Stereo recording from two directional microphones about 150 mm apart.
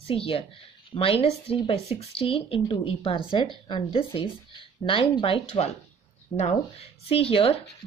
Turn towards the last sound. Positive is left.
turn(degrees=40)  # may be behind; listen again after turning